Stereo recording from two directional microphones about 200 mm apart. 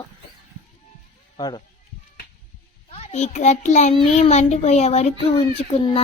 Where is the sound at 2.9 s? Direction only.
30° left (ahead or behind).